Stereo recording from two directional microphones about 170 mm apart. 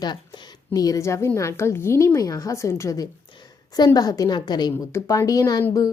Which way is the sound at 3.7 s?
25° left (ahead or behind).